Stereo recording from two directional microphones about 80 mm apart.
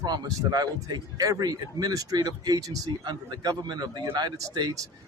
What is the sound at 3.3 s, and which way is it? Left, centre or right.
A man's voice, right.